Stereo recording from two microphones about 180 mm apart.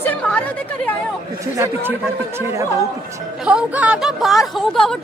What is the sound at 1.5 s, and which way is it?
A woman's voice, 15° right (ahead or behind).